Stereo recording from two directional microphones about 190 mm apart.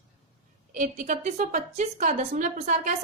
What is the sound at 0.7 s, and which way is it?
A woman's voice, 40° right (ahead or behind).